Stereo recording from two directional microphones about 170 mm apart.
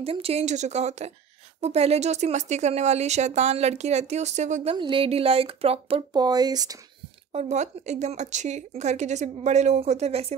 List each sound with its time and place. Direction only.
0.0 s speech: 35° right (ahead or behind)
4.7 s speech: 30° right (ahead or behind)
6.1 s speech: 25° right (ahead or behind)
7.3 s speech: 45° right (ahead or behind)